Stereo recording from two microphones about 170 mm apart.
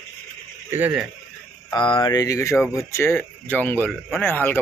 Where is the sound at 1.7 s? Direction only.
25° left (ahead or behind).